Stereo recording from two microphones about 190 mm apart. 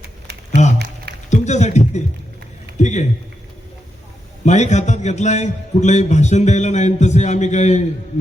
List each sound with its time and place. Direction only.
1.3 s a sound: 40° left (ahead or behind)
2.7 s a man's voice: 40° left (ahead or behind)
4.4 s a man's voice: 40° left (ahead or behind)